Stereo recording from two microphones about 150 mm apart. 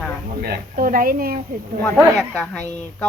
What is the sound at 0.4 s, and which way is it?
Speech, 80° right.